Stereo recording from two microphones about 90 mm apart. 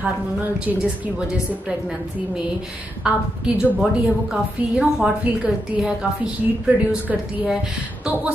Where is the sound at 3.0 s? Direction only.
10° right (ahead or behind).